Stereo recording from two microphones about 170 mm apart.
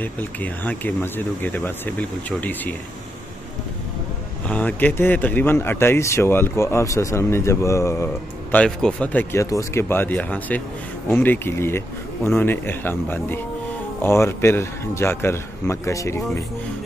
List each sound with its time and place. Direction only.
0.0 s speech: 10° left (ahead or behind)
4.5 s speech: 10° left (ahead or behind)